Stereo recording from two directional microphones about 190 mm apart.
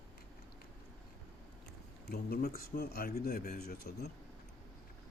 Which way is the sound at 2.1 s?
55° left (ahead or behind).